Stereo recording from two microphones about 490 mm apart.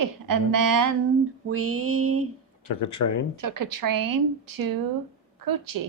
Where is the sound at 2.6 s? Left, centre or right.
Left.